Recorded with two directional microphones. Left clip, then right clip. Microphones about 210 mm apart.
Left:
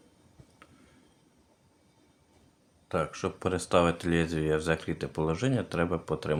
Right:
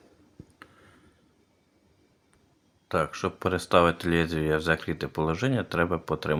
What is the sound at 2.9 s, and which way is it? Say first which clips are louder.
Speech: right 4 dB; 15° right (ahead or behind).